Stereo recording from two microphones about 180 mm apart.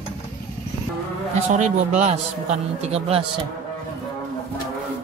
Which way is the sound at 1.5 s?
40° right (ahead or behind).